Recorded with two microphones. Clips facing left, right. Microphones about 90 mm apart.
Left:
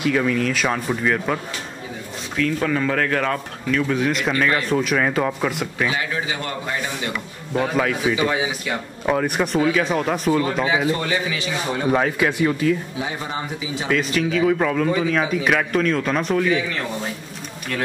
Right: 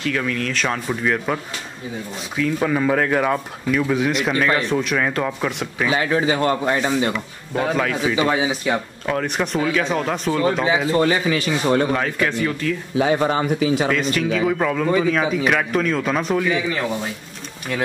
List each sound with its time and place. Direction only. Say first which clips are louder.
0.0 s speech: left 3 dB; 10° left (ahead or behind)
5.9 s a man's voice: right 6 dB; 40° right (ahead or behind)
7.7 s speech: right 1 dB; 5° left (ahead or behind)
8.3 s speech: right 3 dB; 30° right (ahead or behind)
9.0 s speech: left 6 dB; 5° left (ahead or behind)
10.9 s a man's voice: right 5 dB; 40° right (ahead or behind)
11.9 s speech: left 2 dB; 10° left (ahead or behind)
12.9 s speech: right 9 dB; 75° right (ahead or behind)
13.8 s speech: right 1 dB; centre (ahead or behind)